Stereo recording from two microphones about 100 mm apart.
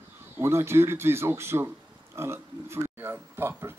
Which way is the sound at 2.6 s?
25° right (ahead or behind).